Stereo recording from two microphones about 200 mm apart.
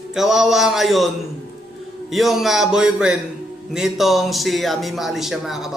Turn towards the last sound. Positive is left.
turn(degrees=0)  # may be behind; listen again after turning